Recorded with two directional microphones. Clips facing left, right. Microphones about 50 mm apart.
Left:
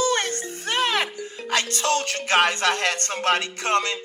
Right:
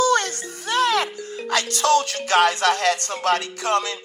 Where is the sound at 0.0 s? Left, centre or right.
Left.